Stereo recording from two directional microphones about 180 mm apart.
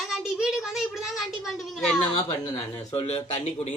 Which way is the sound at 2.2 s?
25° left (ahead or behind).